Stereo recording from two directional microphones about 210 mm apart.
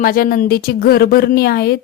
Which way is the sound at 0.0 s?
45° left (ahead or behind).